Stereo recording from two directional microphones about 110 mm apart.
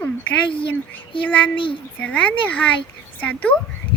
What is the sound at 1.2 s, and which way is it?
Speech, 15° left (ahead or behind).